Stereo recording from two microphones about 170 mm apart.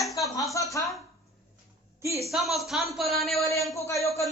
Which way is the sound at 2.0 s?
15° right (ahead or behind).